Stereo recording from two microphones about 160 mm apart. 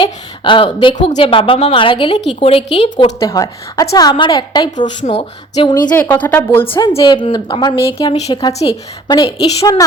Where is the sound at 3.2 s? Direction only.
20° left (ahead or behind).